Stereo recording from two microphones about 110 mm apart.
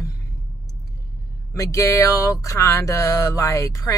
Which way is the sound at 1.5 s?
30° left (ahead or behind).